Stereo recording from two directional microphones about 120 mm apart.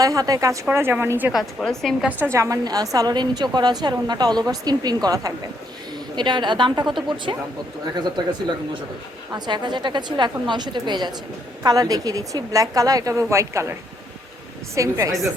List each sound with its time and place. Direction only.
0.0 s a woman's voice: 30° right (ahead or behind)
1.3 s a woman's voice: centre (ahead or behind)
2.0 s a woman's voice: 15° right (ahead or behind); by 8.2 s 35° right (ahead or behind)
9.3 s a woman's voice: 40° right (ahead or behind)
14.8 s a woman's voice: 25° right (ahead or behind)